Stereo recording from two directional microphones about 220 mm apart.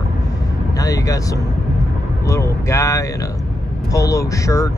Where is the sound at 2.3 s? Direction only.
15° left (ahead or behind).